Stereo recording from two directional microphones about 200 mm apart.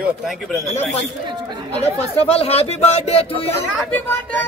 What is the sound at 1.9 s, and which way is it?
Speech, 30° left (ahead or behind).